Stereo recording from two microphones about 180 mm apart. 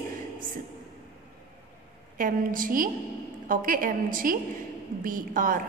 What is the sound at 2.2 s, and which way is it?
A woman's voice, 50° right (ahead or behind).